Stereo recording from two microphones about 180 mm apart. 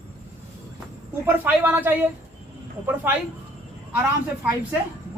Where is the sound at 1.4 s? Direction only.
10° right (ahead or behind).